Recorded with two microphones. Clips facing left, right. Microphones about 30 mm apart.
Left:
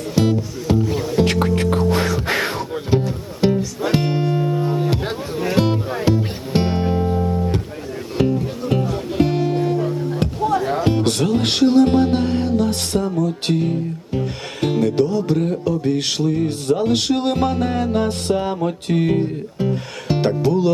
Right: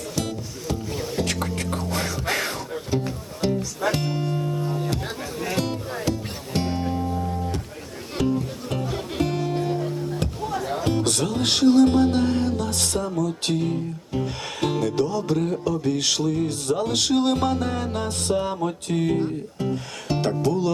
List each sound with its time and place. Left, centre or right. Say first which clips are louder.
0.2 s music: left 12 dB; left
3.6 s music: left 2 dB; centre
3.9 s music: left 7 dB; left
8.6 s music: left 7 dB; centre
13.6 s music: left 4 dB; centre
18.9 s speech: left 4 dB; left